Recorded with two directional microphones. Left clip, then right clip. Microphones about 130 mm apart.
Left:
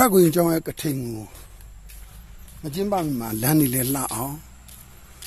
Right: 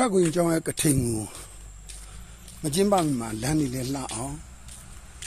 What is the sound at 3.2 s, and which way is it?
Speech, 90° left.